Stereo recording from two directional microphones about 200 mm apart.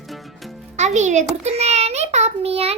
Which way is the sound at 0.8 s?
35° right (ahead or behind).